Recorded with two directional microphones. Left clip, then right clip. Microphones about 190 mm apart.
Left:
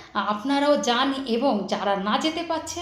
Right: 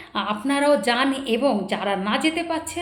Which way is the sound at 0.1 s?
20° right (ahead or behind).